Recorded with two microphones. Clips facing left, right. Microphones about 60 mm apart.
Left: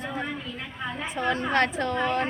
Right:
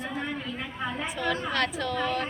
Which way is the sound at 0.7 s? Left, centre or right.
Centre.